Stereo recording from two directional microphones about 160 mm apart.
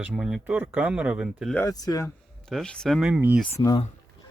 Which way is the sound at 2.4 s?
5° left (ahead or behind).